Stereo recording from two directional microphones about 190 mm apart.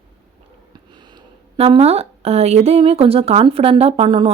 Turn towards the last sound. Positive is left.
turn(degrees=-25)  # may be behind; listen again after turning